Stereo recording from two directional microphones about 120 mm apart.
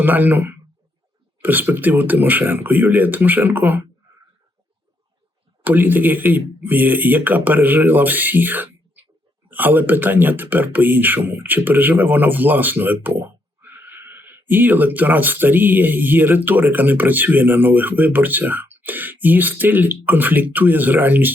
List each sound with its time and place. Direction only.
0.0 s speech: 15° right (ahead or behind)
5.6 s speech: 15° right (ahead or behind)